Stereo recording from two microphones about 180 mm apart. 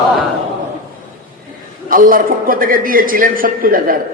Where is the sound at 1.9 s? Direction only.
50° right (ahead or behind).